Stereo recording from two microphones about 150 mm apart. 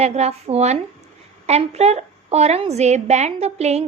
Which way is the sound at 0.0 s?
45° right (ahead or behind).